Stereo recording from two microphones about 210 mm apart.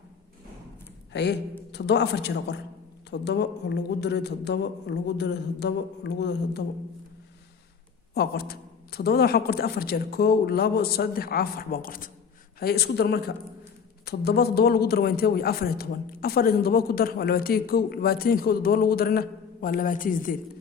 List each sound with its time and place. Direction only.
1.1 s a man's voice: 55° left (ahead or behind)
8.1 s a man's voice: 50° left (ahead or behind)